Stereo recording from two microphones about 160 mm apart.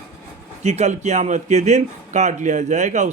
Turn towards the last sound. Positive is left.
turn(degrees=-50)  # may be behind; listen again after turning